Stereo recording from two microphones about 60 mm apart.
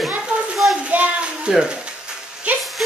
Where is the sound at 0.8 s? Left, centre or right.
Right.